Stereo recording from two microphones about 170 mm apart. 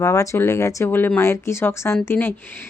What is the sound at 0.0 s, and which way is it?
Speech, 20° left (ahead or behind).